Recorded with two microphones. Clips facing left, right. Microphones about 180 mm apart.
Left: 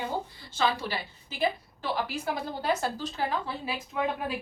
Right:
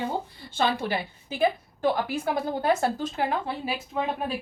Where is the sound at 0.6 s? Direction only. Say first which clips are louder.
Right 3 dB; 55° right (ahead or behind).